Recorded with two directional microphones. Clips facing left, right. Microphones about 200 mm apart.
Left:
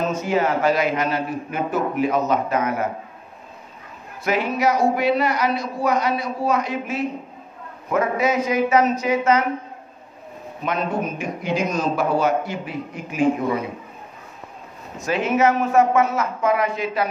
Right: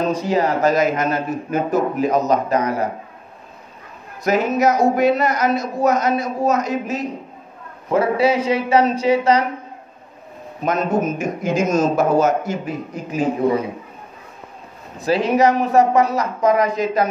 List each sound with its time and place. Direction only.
0.0 s a man's voice: 35° right (ahead or behind)
4.2 s a man's voice: 40° right (ahead or behind)
10.6 s a man's voice: 45° right (ahead or behind)
15.0 s a man's voice: 35° right (ahead or behind)